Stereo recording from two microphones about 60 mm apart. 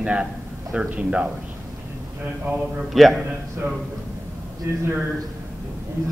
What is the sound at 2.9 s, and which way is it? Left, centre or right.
Speech, centre.